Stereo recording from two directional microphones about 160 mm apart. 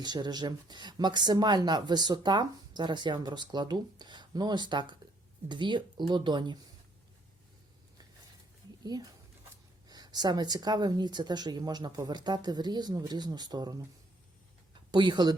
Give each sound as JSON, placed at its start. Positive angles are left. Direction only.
{"t": 0.0, "sound": "speech", "side_deg": -25}
{"t": 8.8, "sound": "speech", "side_deg": -25}
{"t": 14.9, "sound": "speech", "side_deg": -30}